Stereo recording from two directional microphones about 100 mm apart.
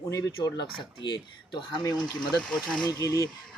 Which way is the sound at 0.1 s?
35° left (ahead or behind).